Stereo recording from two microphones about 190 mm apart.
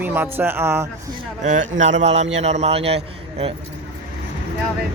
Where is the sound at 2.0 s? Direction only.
35° right (ahead or behind).